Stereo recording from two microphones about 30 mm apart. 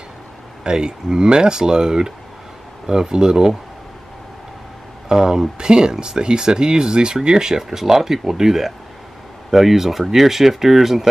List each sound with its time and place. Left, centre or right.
0.7 s speech: right
5.0 s speech: right